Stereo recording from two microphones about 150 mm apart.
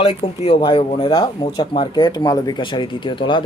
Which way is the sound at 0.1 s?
45° left (ahead or behind).